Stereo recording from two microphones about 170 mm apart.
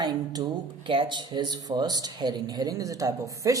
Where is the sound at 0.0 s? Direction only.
25° right (ahead or behind).